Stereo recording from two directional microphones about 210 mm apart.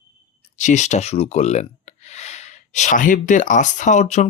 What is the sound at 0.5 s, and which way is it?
Speech, 35° left (ahead or behind).